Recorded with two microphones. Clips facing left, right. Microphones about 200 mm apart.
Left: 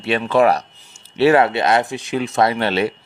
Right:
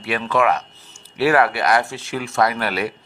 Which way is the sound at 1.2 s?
25° left (ahead or behind).